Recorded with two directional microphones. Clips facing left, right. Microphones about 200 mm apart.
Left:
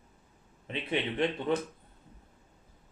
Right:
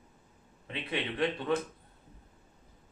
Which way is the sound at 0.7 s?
25° left (ahead or behind).